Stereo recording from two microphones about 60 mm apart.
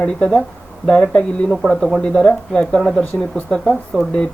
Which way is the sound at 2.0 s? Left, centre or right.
Centre.